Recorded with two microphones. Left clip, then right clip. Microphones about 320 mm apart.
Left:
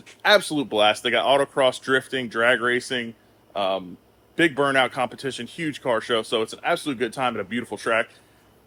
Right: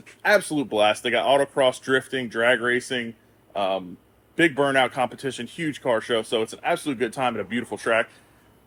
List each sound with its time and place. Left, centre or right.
0.2 s speech: centre